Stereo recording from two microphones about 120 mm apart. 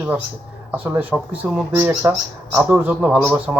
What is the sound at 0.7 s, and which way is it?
Speech, 15° right (ahead or behind).